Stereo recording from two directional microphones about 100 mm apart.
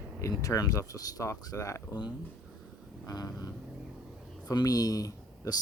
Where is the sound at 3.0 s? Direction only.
40° left (ahead or behind).